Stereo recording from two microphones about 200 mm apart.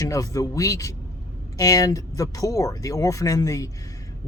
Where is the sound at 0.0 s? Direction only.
15° left (ahead or behind).